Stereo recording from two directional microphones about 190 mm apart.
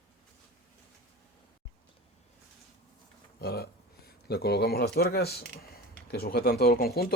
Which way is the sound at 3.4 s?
55° left (ahead or behind).